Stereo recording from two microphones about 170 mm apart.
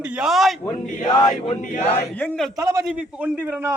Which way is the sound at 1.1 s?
25° left (ahead or behind).